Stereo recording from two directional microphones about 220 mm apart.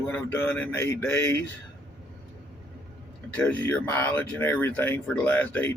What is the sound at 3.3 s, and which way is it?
Speech, 5° left (ahead or behind).